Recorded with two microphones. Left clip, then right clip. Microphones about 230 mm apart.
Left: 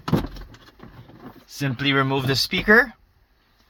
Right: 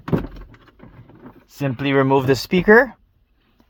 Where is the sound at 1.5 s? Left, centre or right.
Right.